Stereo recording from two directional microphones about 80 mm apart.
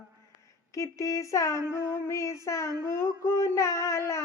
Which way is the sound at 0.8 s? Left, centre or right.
Left.